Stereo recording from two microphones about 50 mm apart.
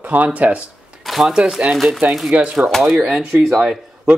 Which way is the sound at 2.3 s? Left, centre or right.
Right.